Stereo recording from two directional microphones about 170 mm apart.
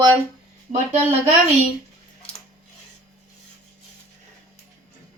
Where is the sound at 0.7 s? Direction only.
45° right (ahead or behind).